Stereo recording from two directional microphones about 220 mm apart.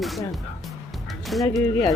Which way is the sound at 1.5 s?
15° left (ahead or behind).